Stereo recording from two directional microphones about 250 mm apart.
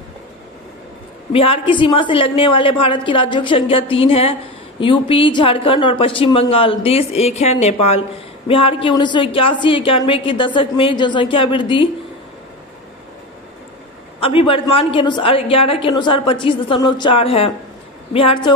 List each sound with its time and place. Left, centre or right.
1.3 s a woman's voice: left
14.2 s a woman's voice: left